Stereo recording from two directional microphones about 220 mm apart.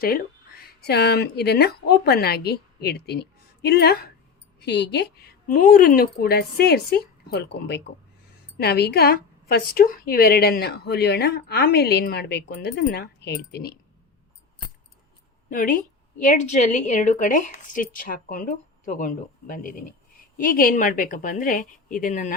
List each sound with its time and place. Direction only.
0.8 s a woman's voice: 50° left (ahead or behind)
15.4 s a woman's voice: 40° left (ahead or behind)